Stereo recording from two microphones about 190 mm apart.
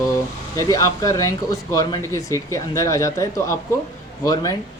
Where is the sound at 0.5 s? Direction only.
15° left (ahead or behind).